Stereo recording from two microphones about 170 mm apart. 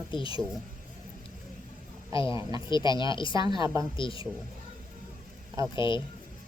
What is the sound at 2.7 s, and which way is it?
Speech, 25° left (ahead or behind).